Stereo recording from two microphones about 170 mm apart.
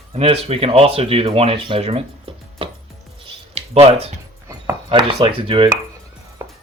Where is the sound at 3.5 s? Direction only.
35° right (ahead or behind).